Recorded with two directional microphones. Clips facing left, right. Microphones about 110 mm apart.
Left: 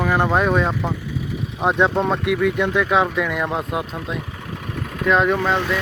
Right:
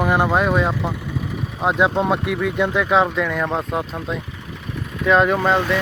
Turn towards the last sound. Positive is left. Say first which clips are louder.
# right 2 dB
turn(degrees=-5)  # may be behind; listen again after turning